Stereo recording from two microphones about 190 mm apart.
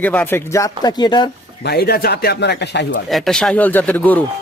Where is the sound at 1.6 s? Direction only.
55° left (ahead or behind).